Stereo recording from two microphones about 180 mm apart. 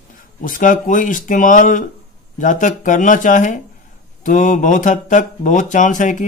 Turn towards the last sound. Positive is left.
turn(degrees=45)  # may be behind; listen again after turning